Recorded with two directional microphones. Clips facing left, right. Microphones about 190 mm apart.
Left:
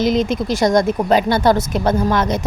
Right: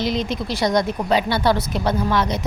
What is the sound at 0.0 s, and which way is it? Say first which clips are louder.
Speech: left 6 dB; 45° left (ahead or behind).